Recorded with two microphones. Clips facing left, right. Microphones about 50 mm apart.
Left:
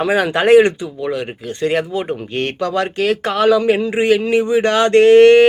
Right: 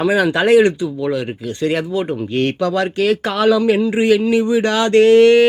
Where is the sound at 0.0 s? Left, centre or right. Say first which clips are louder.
Even; left.